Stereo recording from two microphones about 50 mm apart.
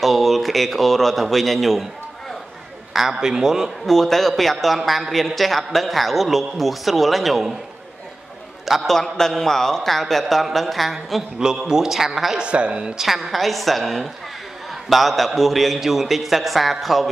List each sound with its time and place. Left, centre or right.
0.0 s a woman's voice: centre
2.9 s a man's voice: centre
3.8 s a woman's voice: centre
8.6 s a man's voice: centre
8.9 s a man's voice: centre
11.3 s a man's voice: centre
12.4 s a woman's voice: right
12.9 s a woman's voice: centre